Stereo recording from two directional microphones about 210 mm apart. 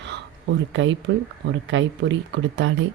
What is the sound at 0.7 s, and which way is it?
Speech, 65° right (ahead or behind).